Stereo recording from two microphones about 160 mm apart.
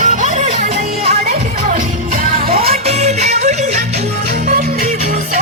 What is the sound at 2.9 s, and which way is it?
Music, 45° right (ahead or behind).